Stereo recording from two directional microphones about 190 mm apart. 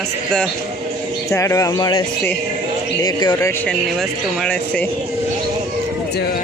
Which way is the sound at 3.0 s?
20° left (ahead or behind).